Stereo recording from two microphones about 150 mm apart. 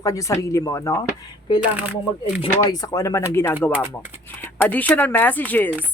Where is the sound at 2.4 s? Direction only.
25° left (ahead or behind).